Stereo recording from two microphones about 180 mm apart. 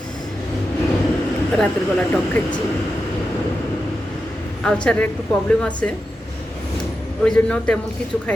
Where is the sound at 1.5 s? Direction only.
5° left (ahead or behind).